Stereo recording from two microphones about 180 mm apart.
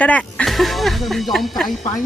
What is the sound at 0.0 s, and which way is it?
Speech, 5° left (ahead or behind).